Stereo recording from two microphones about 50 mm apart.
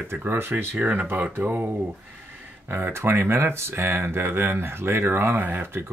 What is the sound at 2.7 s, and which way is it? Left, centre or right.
Speech, right.